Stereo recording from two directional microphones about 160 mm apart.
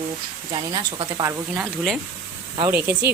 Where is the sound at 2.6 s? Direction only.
15° right (ahead or behind).